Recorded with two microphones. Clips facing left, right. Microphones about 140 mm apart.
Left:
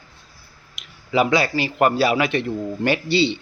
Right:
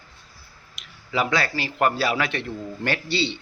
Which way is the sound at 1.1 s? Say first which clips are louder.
Left 5 dB; 15° left (ahead or behind).